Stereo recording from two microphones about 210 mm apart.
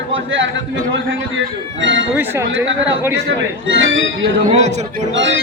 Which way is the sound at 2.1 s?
10° right (ahead or behind).